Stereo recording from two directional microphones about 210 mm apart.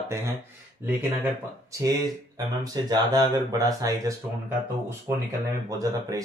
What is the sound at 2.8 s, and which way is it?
Speech, 20° right (ahead or behind).